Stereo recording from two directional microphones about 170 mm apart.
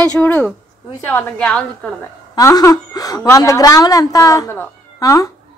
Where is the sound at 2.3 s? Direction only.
20° left (ahead or behind).